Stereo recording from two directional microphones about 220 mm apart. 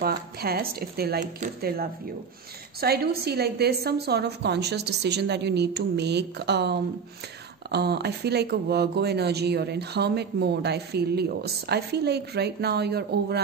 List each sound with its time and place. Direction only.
0.0 s speech: 45° right (ahead or behind)